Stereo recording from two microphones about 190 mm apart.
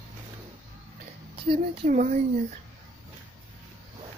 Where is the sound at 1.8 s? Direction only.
45° right (ahead or behind).